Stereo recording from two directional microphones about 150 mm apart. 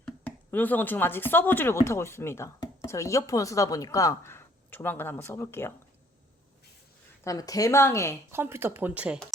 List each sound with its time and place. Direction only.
0.0 s speech: 10° left (ahead or behind)
7.3 s speech: 25° left (ahead or behind)
8.3 s speech: 15° right (ahead or behind)